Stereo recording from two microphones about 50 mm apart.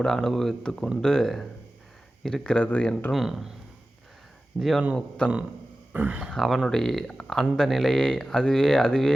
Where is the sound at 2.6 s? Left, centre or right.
Left.